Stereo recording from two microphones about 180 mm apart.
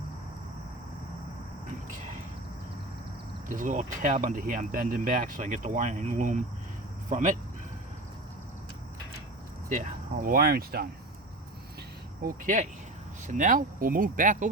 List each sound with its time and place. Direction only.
3.5 s speech: 45° right (ahead or behind)
9.6 s speech: 50° right (ahead or behind)
12.2 s speech: 45° right (ahead or behind)